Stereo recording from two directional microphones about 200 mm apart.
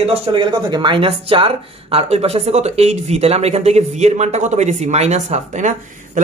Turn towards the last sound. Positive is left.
turn(degrees=-35)  # may be behind; listen again after turning